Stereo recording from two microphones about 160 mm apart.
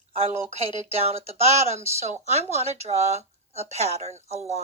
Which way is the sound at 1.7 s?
45° right (ahead or behind).